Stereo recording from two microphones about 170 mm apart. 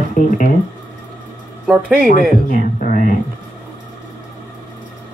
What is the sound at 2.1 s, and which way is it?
Speech, 50° left (ahead or behind).